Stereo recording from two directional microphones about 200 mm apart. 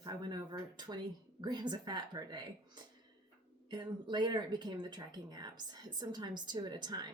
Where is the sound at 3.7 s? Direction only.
20° right (ahead or behind).